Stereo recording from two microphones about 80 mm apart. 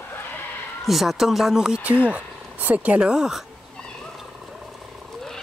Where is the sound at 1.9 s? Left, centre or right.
Centre.